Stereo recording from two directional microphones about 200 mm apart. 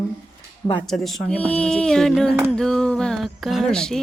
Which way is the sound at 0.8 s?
Centre (ahead or behind).